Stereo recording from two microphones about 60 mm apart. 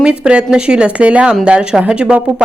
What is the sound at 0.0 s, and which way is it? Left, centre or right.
Speech, centre.